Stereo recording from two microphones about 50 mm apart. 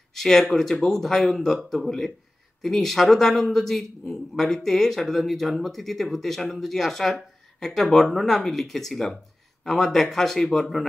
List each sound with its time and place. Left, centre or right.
0.1 s speech: centre